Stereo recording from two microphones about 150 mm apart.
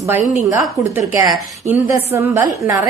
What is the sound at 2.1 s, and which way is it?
Speech, 20° right (ahead or behind).